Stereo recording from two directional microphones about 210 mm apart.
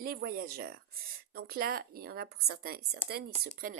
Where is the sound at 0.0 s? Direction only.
45° right (ahead or behind).